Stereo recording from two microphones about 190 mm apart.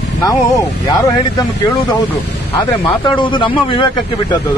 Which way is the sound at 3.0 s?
25° left (ahead or behind).